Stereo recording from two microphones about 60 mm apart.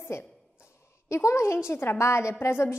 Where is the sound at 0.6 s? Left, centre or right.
Left.